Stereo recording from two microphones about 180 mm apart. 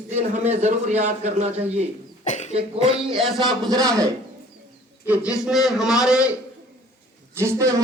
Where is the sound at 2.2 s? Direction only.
40° left (ahead or behind).